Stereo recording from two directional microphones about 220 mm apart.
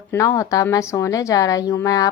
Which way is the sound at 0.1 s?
15° left (ahead or behind).